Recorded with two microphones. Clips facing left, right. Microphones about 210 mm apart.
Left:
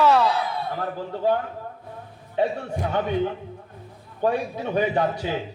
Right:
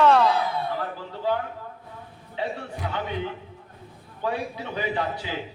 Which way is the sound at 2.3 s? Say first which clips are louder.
Left 7 dB; 45° left (ahead or behind).